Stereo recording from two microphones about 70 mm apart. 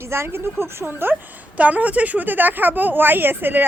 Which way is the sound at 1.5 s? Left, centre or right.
Right.